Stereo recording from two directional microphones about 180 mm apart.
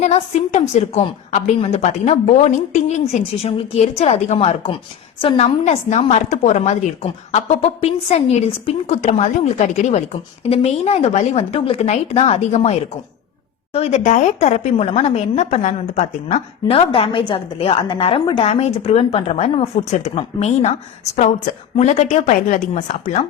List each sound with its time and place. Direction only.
0.0 s a woman's voice: 40° left (ahead or behind)
13.7 s a woman's voice: 35° left (ahead or behind)